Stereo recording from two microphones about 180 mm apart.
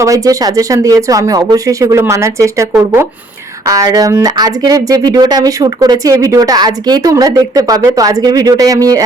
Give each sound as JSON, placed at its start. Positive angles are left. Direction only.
{"t": 0.0, "sound": "speech", "side_deg": -20}